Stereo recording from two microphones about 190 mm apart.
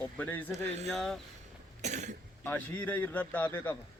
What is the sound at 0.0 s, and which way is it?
A man's voice, 10° left (ahead or behind).